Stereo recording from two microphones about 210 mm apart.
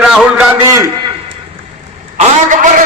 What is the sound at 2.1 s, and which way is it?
Speech, 40° right (ahead or behind).